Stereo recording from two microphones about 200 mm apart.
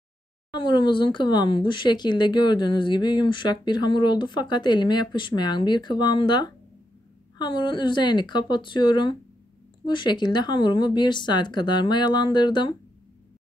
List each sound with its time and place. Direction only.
0.5 s speech: 20° left (ahead or behind)